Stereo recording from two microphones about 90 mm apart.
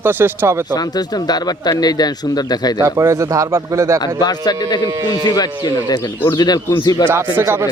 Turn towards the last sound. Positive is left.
turn(degrees=-25)  # may be behind; listen again after turning